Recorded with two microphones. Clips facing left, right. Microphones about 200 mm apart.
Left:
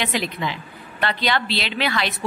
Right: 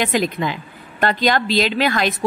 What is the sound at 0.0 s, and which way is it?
A woman's voice, 45° right (ahead or behind).